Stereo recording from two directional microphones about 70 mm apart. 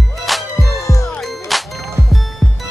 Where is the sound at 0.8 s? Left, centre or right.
Left.